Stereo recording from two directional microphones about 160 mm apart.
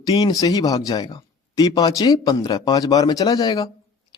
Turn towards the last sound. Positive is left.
turn(degrees=25)  # may be behind; listen again after turning